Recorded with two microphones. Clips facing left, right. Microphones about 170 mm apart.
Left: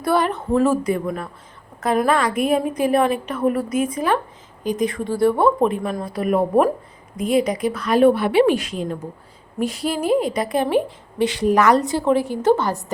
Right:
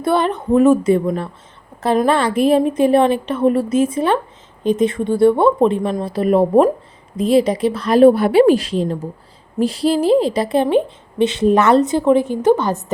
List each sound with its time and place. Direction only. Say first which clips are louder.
0.0 s a woman's voice: right 3 dB; 25° right (ahead or behind)